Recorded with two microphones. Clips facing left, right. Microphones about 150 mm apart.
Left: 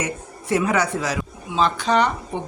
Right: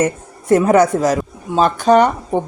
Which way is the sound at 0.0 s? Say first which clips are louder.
Right 10 dB; 45° right (ahead or behind).